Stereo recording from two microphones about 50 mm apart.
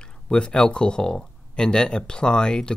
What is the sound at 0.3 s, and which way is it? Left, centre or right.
Speech, centre.